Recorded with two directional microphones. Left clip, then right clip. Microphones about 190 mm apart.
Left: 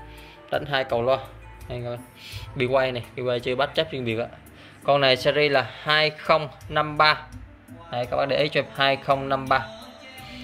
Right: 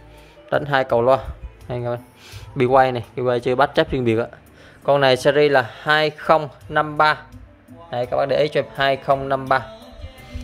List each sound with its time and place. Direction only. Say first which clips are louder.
0.5 s speech: right 6 dB; 35° right (ahead or behind)
4.8 s speech: right 4 dB; 25° right (ahead or behind)